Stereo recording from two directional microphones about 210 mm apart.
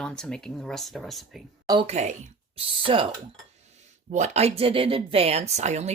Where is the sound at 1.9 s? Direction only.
35° right (ahead or behind).